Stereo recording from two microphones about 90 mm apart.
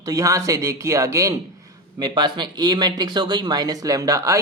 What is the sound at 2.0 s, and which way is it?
Speech, 55° right (ahead or behind).